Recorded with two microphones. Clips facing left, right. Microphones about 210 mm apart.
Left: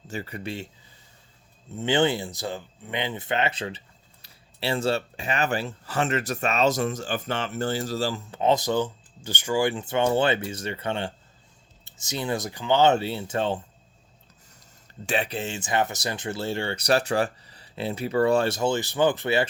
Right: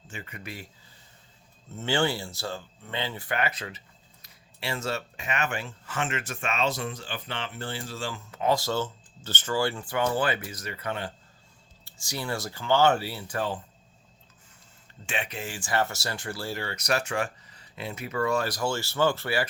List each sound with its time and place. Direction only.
0.1 s speech: 35° left (ahead or behind)
1.7 s speech: 20° left (ahead or behind)
15.0 s speech: 35° left (ahead or behind); by 19.5 s 20° left (ahead or behind)